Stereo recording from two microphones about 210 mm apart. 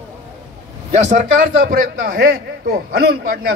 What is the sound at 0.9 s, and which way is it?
A man's voice, 35° right (ahead or behind).